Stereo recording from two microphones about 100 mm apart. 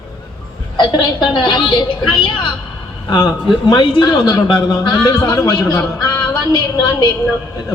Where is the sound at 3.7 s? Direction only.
50° left (ahead or behind).